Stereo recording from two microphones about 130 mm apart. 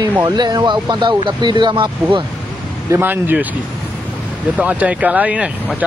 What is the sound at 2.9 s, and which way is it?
Speech, 15° right (ahead or behind).